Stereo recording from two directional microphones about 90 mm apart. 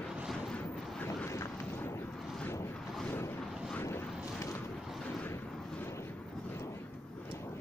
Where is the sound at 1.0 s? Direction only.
30° left (ahead or behind).